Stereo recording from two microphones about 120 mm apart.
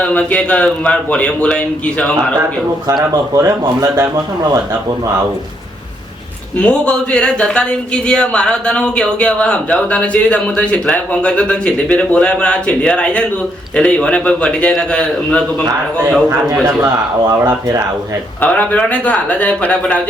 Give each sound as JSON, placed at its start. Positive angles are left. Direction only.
{"t": 0.0, "sound": "speech", "side_deg": 10}
{"t": 3.1, "sound": "speech", "side_deg": -30}
{"t": 6.6, "sound": "speech", "side_deg": 10}
{"t": 16.6, "sound": "speech", "side_deg": -25}
{"t": 18.3, "sound": "speech", "side_deg": 10}